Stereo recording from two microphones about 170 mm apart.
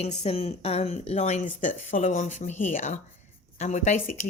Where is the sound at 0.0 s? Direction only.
40° left (ahead or behind).